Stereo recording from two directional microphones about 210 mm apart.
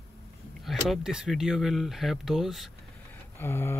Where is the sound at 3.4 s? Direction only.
10° left (ahead or behind).